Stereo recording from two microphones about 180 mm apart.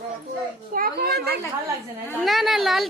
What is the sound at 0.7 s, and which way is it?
Speech, 55° right (ahead or behind).